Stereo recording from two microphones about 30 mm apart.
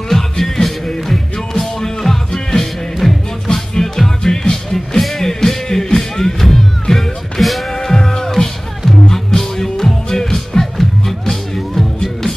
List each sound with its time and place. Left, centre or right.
0.1 s music: centre
7.7 s music: centre